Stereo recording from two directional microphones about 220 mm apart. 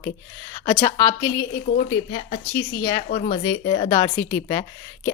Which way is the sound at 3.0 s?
35° left (ahead or behind).